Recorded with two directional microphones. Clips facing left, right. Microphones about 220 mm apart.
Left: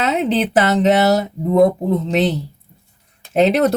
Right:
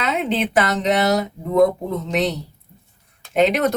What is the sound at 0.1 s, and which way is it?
Speech, 35° left (ahead or behind).